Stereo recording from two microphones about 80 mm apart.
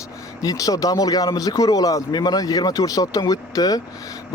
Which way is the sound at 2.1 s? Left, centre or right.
Left.